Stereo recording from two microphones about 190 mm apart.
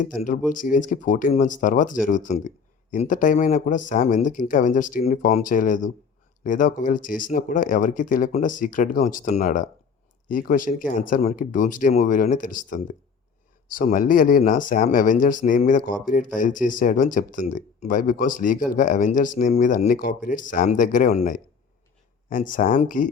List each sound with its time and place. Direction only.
0.0 s speech: 45° left (ahead or behind)